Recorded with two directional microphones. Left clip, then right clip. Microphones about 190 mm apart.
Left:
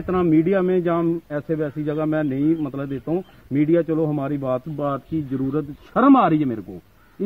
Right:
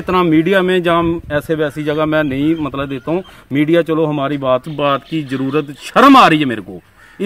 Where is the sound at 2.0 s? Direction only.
10° right (ahead or behind).